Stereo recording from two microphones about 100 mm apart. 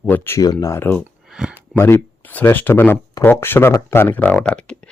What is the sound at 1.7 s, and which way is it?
Speech, 25° left (ahead or behind).